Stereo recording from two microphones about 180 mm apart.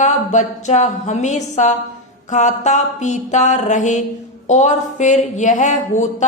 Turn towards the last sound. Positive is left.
turn(degrees=45)  # may be behind; listen again after turning